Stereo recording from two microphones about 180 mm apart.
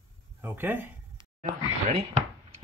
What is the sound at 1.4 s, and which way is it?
Speech, 40° right (ahead or behind).